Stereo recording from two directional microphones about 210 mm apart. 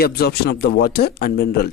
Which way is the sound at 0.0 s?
50° left (ahead or behind).